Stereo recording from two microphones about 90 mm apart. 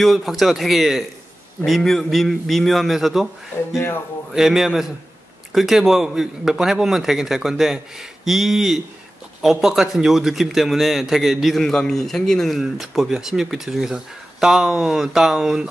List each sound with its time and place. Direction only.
0.0 s a man's voice: centre (ahead or behind)
3.7 s speech: 30° left (ahead or behind)
4.3 s a man's voice: 5° right (ahead or behind)